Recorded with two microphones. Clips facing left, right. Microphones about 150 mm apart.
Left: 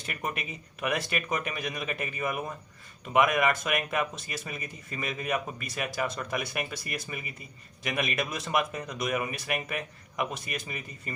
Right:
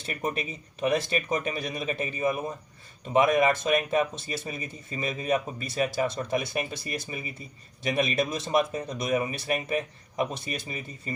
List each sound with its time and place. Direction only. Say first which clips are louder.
0.0 s speech: right 4 dB; 30° right (ahead or behind)